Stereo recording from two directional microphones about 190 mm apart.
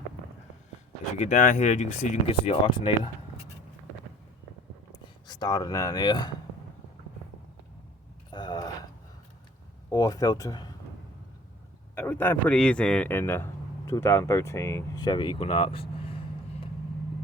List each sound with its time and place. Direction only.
1.2 s speech: 40° left (ahead or behind); by 3.1 s 25° left (ahead or behind)
5.2 s speech: 20° left (ahead or behind)
8.3 s a sound: 20° left (ahead or behind)
9.9 s speech: 15° left (ahead or behind)
11.9 s speech: 10° left (ahead or behind); by 16.2 s 30° left (ahead or behind)